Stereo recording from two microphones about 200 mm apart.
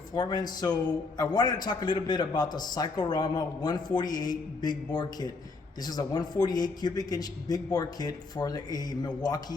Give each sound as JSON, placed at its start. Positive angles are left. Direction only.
{"t": 0.1, "sound": "a man's voice", "side_deg": 20}